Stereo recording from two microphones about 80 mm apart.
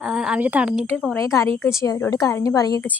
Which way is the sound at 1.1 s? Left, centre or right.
Left.